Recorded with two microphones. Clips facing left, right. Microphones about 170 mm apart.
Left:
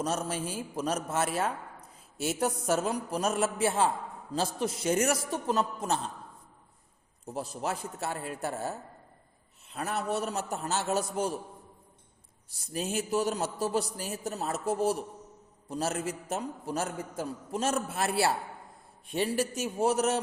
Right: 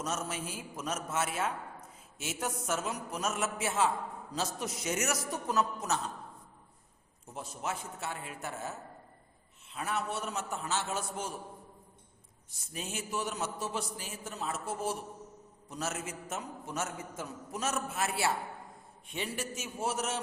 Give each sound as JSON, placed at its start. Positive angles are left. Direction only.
{"t": 0.0, "sound": "a man's voice", "side_deg": 30}
{"t": 7.3, "sound": "a man's voice", "side_deg": 35}
{"t": 12.9, "sound": "a man's voice", "side_deg": 40}